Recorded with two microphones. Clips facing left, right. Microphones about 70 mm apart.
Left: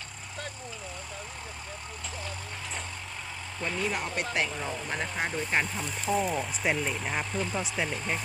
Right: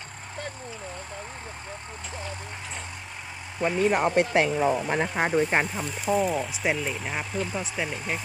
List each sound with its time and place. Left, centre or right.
3.6 s speech: centre
3.9 s speech: right
5.7 s speech: centre